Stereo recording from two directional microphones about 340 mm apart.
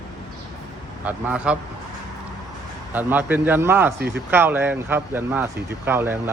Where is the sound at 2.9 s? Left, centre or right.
Centre.